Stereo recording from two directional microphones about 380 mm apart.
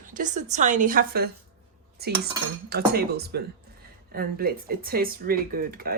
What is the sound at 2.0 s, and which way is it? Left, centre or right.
Cutlery, right.